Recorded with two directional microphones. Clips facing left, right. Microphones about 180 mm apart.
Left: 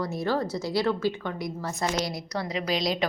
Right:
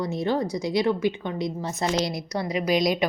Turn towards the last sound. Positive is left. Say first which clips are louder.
# right 4 dB
turn(degrees=-15)  # may be behind; listen again after turning